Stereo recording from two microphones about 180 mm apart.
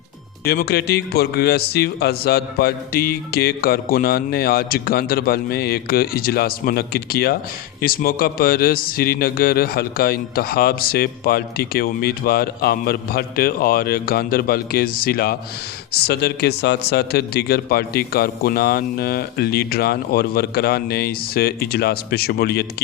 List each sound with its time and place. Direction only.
0.4 s speech: 60° left (ahead or behind)